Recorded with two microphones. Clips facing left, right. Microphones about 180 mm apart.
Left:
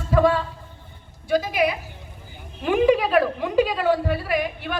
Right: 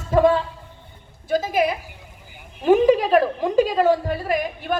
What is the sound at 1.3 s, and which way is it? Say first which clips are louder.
A woman's voice: right 1 dB; 45° right (ahead or behind).